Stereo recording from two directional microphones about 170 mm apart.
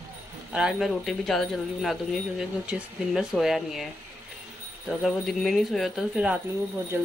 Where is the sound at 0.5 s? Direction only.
Centre (ahead or behind).